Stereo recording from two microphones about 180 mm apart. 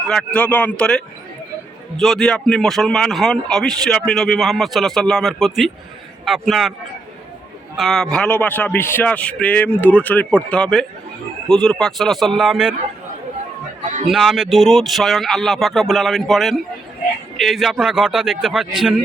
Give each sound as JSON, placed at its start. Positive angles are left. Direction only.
{"t": 0.1, "sound": "a man's voice", "side_deg": 5}
{"t": 7.8, "sound": "a man's voice", "side_deg": 0}
{"t": 13.8, "sound": "a man's voice", "side_deg": -45}
{"t": 14.1, "sound": "a man's voice", "side_deg": 0}